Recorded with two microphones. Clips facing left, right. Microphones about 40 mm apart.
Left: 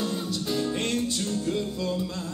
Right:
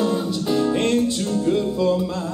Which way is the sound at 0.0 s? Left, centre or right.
Centre.